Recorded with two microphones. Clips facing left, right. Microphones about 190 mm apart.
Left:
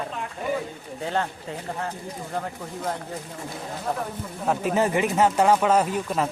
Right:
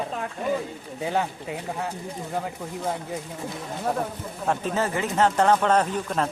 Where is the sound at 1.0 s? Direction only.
10° right (ahead or behind).